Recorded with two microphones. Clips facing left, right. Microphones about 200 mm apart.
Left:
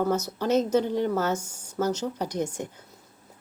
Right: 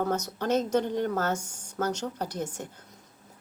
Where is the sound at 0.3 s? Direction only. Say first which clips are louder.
Left 3 dB; 10° left (ahead or behind).